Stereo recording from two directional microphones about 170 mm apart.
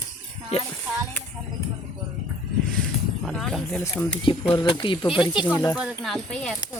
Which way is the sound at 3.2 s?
Centre (ahead or behind).